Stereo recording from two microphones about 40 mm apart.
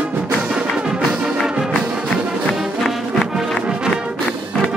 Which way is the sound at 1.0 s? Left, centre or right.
Right.